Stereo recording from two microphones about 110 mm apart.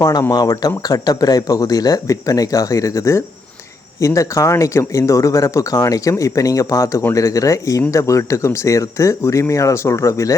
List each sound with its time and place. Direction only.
0.0 s speech: 35° left (ahead or behind)